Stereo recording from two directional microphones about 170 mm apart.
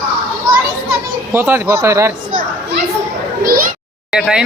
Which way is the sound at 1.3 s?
15° right (ahead or behind).